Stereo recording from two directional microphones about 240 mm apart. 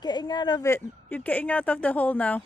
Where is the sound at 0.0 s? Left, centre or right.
Centre.